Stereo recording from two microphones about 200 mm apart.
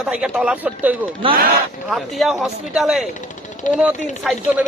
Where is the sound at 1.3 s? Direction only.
45° right (ahead or behind).